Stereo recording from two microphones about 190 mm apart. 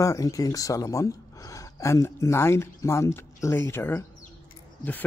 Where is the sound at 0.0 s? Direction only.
15° left (ahead or behind).